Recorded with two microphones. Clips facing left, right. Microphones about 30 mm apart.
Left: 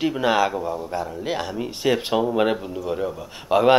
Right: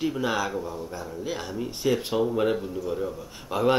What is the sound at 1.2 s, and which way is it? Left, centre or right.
Speech, left.